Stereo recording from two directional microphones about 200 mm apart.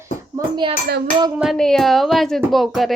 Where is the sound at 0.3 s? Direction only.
20° right (ahead or behind).